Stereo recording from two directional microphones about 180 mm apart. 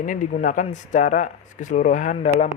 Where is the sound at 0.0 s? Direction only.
45° left (ahead or behind).